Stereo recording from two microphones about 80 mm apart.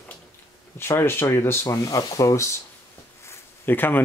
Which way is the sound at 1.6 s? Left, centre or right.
Left.